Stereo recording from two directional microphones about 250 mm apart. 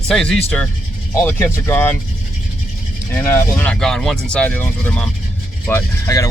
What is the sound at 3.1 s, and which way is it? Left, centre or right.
Speech, centre.